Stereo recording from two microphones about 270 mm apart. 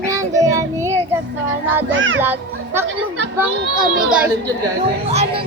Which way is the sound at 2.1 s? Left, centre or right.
Centre.